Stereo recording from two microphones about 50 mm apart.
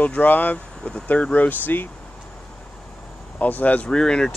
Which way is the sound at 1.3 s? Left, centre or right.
Left.